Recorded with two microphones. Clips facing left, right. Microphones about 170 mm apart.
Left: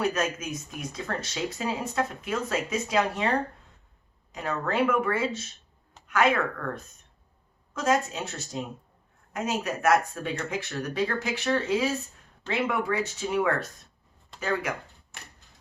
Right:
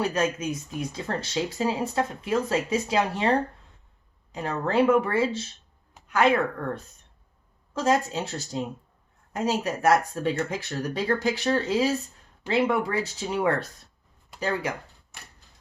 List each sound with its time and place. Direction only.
0.0 s speech: 30° right (ahead or behind)
7.7 s speech: 30° right (ahead or behind)